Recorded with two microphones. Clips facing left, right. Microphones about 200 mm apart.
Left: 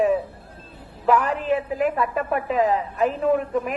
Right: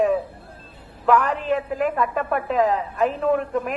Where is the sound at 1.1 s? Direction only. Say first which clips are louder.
Right 1 dB; 40° left (ahead or behind).